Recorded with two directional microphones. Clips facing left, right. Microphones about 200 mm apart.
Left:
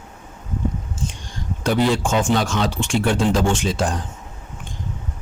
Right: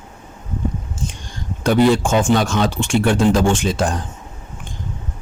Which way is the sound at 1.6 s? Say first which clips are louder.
Right 5 dB; 50° right (ahead or behind).